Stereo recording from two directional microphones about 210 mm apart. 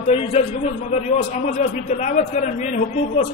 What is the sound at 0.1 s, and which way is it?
A man's voice, 30° left (ahead or behind).